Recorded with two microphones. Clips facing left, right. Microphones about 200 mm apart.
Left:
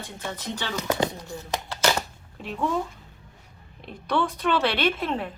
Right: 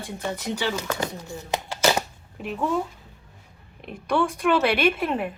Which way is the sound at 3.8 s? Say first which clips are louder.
Right 2 dB; 10° right (ahead or behind).